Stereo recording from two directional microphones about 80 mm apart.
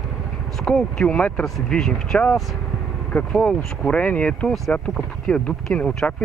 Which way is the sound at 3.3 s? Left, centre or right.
Centre.